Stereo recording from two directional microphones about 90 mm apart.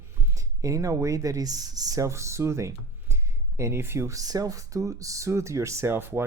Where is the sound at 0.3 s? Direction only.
35° right (ahead or behind).